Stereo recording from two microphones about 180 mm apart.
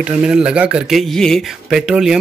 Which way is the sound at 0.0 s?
5° right (ahead or behind).